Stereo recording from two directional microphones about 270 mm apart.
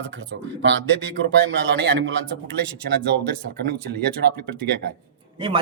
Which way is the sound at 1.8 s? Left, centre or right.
Right.